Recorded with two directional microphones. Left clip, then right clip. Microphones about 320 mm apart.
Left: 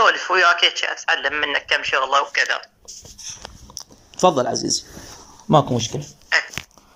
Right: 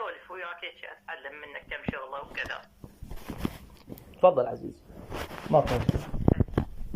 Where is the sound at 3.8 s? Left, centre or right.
Left.